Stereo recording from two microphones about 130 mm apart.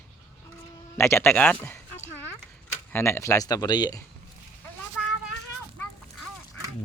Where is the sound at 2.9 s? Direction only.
20° left (ahead or behind); by 4.0 s 35° left (ahead or behind).